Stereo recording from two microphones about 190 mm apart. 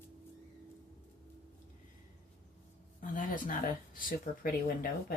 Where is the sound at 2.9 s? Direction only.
45° left (ahead or behind).